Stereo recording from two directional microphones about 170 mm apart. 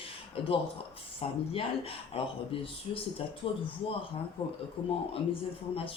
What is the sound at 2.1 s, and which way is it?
Speech, 35° left (ahead or behind).